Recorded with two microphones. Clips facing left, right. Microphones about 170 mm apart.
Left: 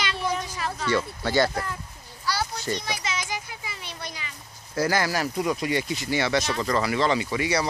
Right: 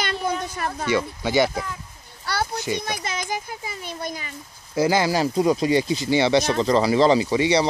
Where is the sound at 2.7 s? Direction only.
55° right (ahead or behind).